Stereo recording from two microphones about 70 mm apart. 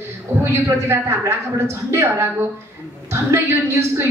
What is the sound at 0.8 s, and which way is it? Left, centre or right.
A woman's voice, right.